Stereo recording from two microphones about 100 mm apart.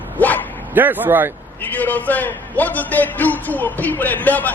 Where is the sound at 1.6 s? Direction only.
15° left (ahead or behind).